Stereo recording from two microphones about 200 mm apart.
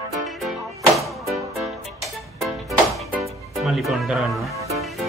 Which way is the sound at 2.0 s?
Centre (ahead or behind).